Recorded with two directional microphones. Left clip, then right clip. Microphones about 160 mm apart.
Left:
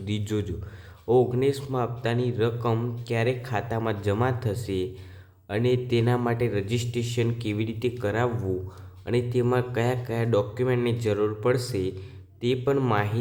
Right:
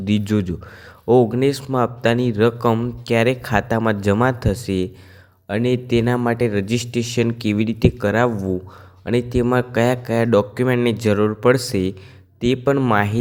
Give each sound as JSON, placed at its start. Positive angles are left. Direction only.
{"t": 0.0, "sound": "speech", "side_deg": -40}